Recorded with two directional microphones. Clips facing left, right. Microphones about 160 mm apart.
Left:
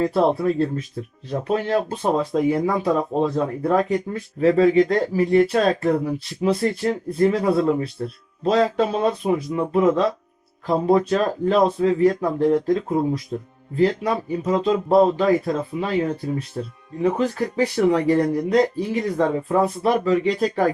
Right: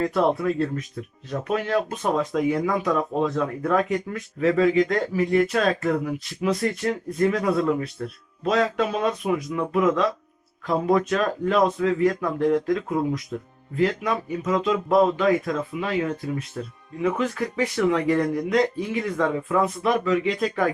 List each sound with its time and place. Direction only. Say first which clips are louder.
0.0 s speech: left 3 dB; 30° left (ahead or behind)